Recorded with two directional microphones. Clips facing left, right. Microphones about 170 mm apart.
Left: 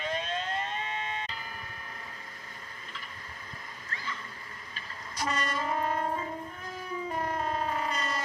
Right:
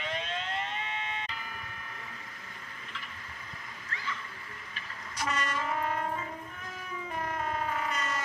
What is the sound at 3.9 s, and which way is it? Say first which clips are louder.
Music: right 1 dB; 35° left (ahead or behind).